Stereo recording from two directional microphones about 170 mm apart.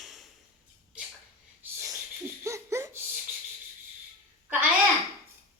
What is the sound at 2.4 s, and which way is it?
Laughter, 15° right (ahead or behind).